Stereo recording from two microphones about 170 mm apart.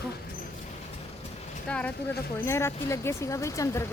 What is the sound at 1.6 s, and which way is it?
Speech, 10° left (ahead or behind).